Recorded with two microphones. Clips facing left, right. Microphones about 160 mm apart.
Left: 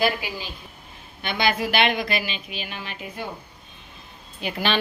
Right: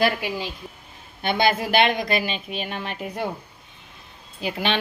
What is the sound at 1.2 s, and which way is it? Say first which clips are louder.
A woman's voice: right 3 dB; 50° right (ahead or behind).